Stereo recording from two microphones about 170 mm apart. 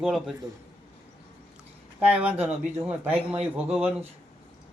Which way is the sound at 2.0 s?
10° right (ahead or behind).